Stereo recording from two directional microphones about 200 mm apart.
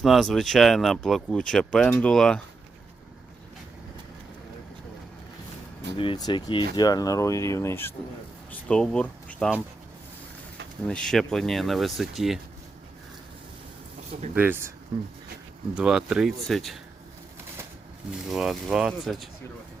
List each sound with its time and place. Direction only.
0.0 s speech: centre (ahead or behind)
6.0 s speech: 20° left (ahead or behind); by 9.6 s 5° left (ahead or behind)
10.8 s speech: 5° left (ahead or behind)
14.3 s speech: 10° right (ahead or behind)
15.7 s speech: 5° right (ahead or behind)
18.3 s speech: centre (ahead or behind)